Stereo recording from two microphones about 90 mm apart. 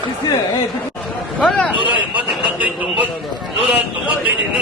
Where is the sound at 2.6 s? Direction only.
15° right (ahead or behind).